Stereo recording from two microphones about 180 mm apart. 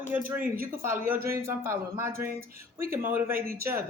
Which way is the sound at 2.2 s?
55° right (ahead or behind).